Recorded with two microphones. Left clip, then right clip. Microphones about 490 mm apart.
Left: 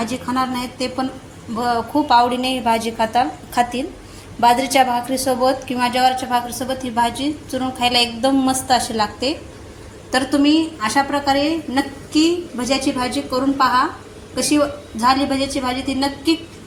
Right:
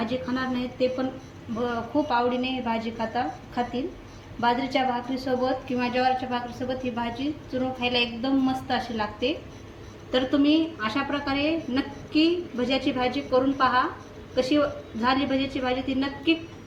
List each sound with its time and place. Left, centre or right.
0.0 s a woman's voice: right
15.0 s a woman's voice: right